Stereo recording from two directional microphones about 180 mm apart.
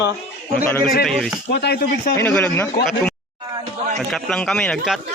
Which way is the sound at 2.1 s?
5° left (ahead or behind).